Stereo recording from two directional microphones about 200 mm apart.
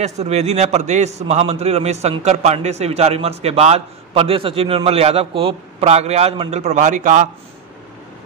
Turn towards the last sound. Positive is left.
turn(degrees=-40)  # may be behind; listen again after turning